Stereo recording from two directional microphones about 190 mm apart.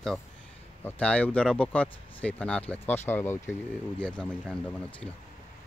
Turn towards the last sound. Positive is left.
turn(degrees=5)  # may be behind; listen again after turning